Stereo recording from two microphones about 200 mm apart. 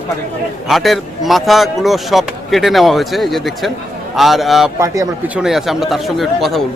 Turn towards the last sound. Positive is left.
turn(degrees=0)  # may be behind; listen again after turning